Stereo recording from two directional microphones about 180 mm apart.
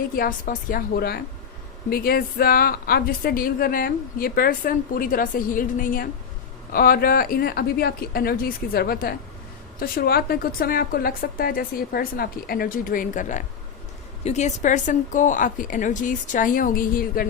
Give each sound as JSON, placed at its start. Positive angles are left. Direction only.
{"t": 0.2, "sound": "a woman's voice", "side_deg": 50}